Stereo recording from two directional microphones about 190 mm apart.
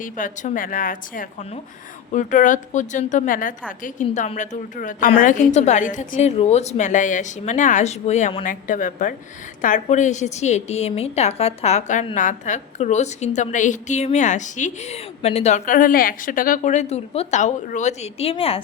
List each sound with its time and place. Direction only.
0.0 s a woman's voice: 45° left (ahead or behind)
8.4 s a woman's voice: 45° left (ahead or behind)